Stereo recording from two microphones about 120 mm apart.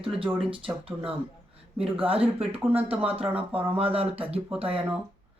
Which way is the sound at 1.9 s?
55° right (ahead or behind).